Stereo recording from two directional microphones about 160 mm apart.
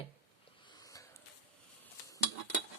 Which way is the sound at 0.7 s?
20° left (ahead or behind).